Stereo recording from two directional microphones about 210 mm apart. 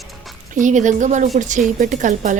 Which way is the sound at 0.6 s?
35° right (ahead or behind).